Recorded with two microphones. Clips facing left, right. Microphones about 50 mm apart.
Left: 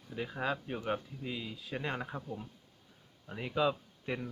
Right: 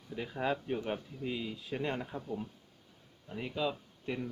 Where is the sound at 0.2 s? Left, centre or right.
Centre.